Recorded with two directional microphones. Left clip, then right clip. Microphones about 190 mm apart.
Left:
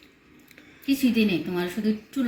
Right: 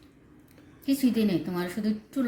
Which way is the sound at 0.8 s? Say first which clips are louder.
Left 3 dB; 65° right (ahead or behind).